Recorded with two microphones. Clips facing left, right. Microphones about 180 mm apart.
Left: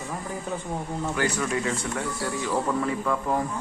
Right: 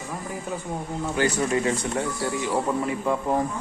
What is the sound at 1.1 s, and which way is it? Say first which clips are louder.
Speech: right 4 dB; 30° right (ahead or behind).